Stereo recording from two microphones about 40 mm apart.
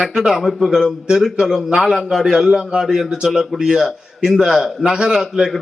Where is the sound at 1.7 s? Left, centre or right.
Centre.